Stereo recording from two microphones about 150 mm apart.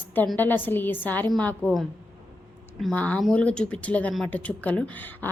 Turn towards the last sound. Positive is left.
turn(degrees=10)  # may be behind; listen again after turning